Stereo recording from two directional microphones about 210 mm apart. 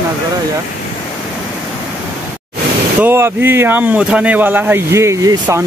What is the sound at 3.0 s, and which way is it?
Speech, 10° right (ahead or behind).